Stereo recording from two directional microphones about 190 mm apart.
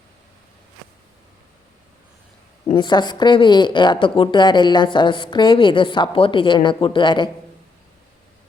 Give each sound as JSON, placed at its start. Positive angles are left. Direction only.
{"t": 2.6, "sound": "speech", "side_deg": 25}